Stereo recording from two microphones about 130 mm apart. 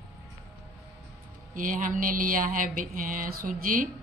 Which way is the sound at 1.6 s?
90° right.